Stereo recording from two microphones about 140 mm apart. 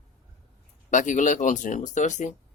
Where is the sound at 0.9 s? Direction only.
60° left (ahead or behind).